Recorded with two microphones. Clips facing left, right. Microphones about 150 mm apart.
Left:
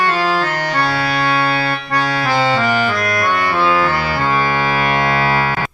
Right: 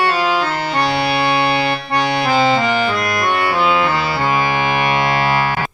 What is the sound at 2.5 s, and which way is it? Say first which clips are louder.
Clarinet: even; 20° right (ahead or behind).